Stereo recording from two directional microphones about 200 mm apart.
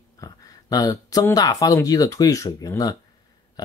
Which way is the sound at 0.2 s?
20° left (ahead or behind).